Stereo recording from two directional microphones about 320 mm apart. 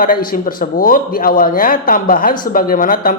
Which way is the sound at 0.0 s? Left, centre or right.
Left.